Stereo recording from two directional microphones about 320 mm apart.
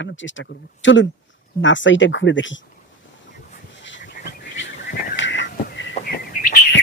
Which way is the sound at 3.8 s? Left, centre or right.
Left.